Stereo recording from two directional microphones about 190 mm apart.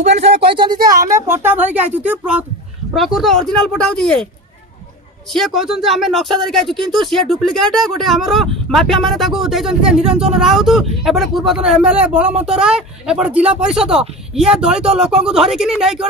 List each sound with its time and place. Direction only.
0.0 s speech: 35° right (ahead or behind)
0.5 s speech: 25° right (ahead or behind)
0.7 s speech: 50° right (ahead or behind)
1.0 s speech: 15° right (ahead or behind); by 4.3 s 5° left (ahead or behind)
5.3 s speech: centre (ahead or behind)